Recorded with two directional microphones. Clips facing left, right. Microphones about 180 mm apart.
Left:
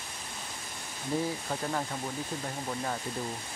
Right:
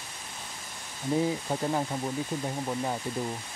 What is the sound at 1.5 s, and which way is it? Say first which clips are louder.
Speech: right 4 dB; 20° right (ahead or behind).